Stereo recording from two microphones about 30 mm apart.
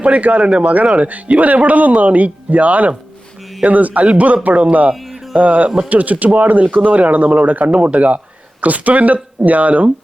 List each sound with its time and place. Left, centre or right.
0.0 s speech: right
0.6 s speech: right
7.6 s speech: right
8.6 s speech: right